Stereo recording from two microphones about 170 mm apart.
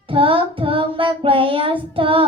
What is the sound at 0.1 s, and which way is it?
Child singing, 30° right (ahead or behind).